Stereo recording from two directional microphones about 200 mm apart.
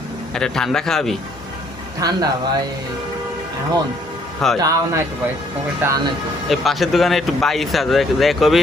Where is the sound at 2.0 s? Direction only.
20° right (ahead or behind).